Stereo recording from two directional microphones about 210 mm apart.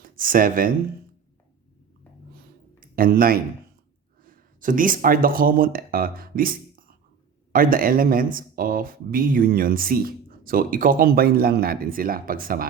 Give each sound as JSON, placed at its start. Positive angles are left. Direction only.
{"t": 0.0, "sound": "speech", "side_deg": -40}
{"t": 2.8, "sound": "speech", "side_deg": -45}